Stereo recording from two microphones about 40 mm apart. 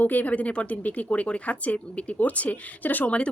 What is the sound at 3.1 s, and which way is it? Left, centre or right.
Speech, left.